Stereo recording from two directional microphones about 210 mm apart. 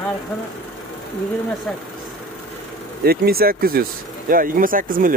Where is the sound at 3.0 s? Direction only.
45° right (ahead or behind).